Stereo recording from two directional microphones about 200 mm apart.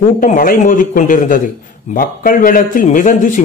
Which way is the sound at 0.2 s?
45° left (ahead or behind).